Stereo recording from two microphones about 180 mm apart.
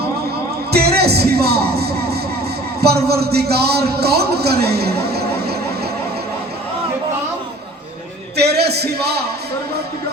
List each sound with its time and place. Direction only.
0.7 s music: 60° right (ahead or behind)
2.8 s a man's voice: 60° right (ahead or behind)
8.4 s a man's voice: 65° right (ahead or behind)